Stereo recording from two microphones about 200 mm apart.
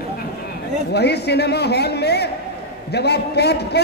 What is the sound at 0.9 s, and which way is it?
A man's voice, 55° left (ahead or behind).